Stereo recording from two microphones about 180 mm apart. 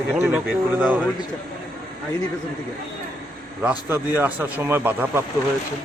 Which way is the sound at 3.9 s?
10° right (ahead or behind).